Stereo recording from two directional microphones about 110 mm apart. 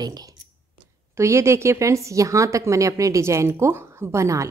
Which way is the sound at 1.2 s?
25° right (ahead or behind).